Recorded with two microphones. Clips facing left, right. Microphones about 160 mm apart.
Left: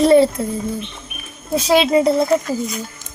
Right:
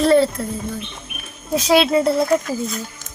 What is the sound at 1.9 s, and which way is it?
Speech, 5° left (ahead or behind).